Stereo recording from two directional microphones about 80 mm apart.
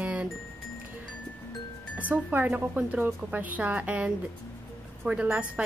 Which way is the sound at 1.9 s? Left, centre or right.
Centre.